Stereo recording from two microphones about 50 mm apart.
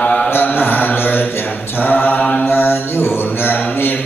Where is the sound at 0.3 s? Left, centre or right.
Left.